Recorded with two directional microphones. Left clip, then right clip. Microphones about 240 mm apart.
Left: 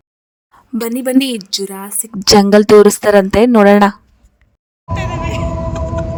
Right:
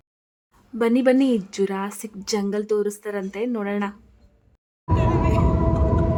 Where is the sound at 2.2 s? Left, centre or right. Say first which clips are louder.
Left 17 dB; left.